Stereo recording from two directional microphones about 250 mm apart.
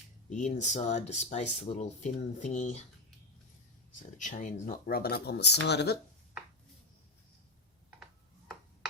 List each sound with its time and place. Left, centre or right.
0.3 s speech: left
4.2 s speech: left